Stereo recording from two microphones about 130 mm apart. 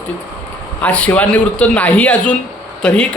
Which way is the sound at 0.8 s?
10° left (ahead or behind).